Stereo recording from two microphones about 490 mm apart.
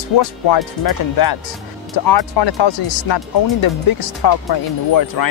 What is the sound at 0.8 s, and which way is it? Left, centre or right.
Speech, left.